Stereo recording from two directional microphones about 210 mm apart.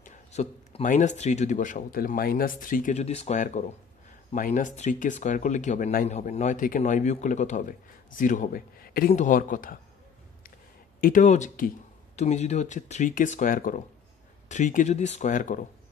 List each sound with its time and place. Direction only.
0.0 s speech: 35° left (ahead or behind)
11.0 s speech: 40° left (ahead or behind)